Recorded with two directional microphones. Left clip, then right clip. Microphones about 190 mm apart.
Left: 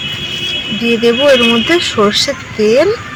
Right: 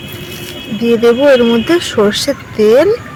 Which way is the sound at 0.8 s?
30° right (ahead or behind).